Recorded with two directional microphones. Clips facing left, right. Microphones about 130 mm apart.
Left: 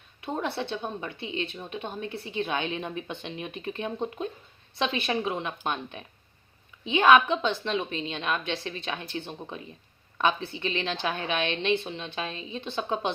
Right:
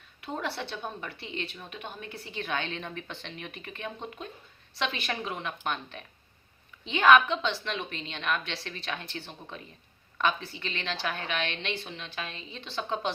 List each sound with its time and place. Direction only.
0.2 s a woman's voice: 20° left (ahead or behind)